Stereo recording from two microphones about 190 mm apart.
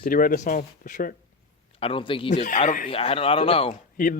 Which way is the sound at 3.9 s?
45° left (ahead or behind).